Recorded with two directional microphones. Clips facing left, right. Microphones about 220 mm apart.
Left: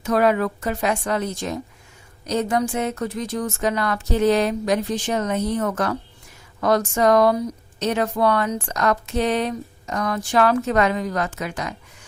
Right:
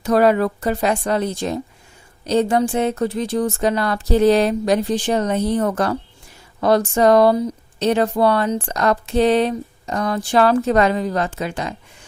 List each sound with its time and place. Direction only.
0.0 s speech: 35° right (ahead or behind)